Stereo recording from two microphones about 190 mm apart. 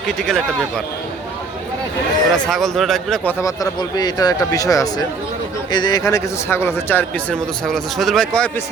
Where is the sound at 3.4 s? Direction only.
20° left (ahead or behind).